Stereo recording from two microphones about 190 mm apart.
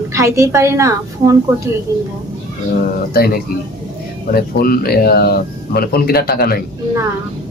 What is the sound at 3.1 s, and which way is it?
Speech, 55° left (ahead or behind).